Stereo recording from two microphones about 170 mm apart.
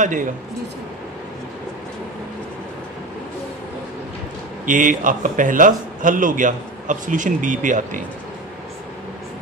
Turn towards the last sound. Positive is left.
turn(degrees=-50)  # may be behind; listen again after turning